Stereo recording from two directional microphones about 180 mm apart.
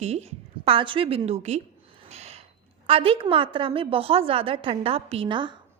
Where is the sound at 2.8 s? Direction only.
30° right (ahead or behind).